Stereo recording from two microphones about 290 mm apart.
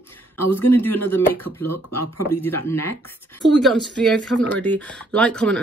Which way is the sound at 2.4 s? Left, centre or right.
Centre.